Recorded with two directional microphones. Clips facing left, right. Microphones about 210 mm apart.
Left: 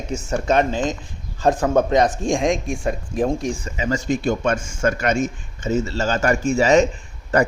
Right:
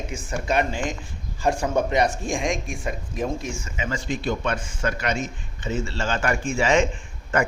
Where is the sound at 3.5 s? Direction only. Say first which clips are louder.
Left 6 dB; 35° left (ahead or behind).